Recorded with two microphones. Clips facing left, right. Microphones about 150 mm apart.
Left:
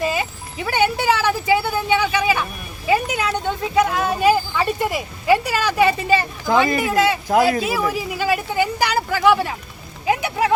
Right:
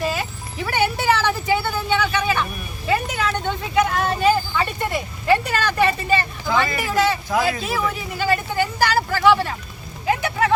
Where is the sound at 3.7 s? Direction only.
5° left (ahead or behind).